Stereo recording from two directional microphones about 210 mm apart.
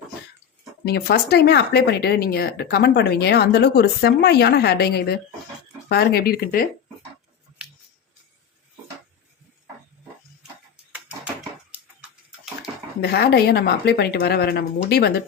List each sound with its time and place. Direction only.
0.9 s speech: 50° left (ahead or behind)
13.0 s speech: 50° left (ahead or behind)